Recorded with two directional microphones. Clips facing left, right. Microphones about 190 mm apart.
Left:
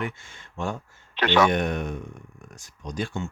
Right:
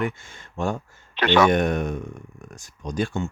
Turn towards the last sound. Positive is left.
turn(degrees=-50)  # may be behind; listen again after turning